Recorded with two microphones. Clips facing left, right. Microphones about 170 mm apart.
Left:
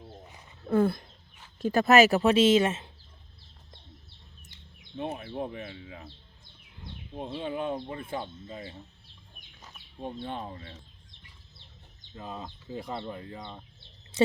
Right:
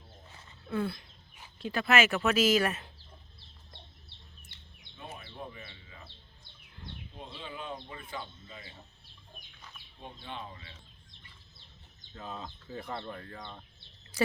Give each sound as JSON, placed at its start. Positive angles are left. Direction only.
{"t": 0.7, "sound": "speech", "side_deg": 45}
{"t": 4.9, "sound": "speech", "side_deg": 60}
{"t": 7.2, "sound": "speech", "side_deg": 55}
{"t": 10.2, "sound": "speech", "side_deg": 40}
{"t": 12.1, "sound": "speech", "side_deg": 10}